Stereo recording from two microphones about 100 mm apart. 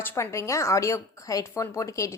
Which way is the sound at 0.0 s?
25° left (ahead or behind).